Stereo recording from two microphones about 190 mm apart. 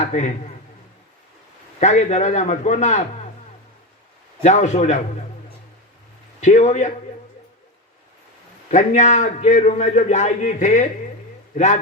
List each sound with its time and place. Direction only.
0.0 s a man's voice: 35° left (ahead or behind)
1.8 s a man's voice: 40° left (ahead or behind)
4.4 s a man's voice: 40° left (ahead or behind)
6.4 s a man's voice: 40° left (ahead or behind)
8.7 s a man's voice: 40° left (ahead or behind)